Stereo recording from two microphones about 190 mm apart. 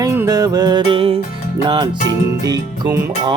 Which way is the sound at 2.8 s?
15° right (ahead or behind).